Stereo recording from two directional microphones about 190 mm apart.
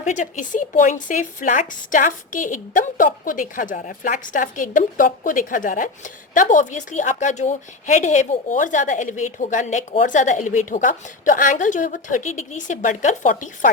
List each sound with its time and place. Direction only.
0.0 s a woman's voice: 40° left (ahead or behind)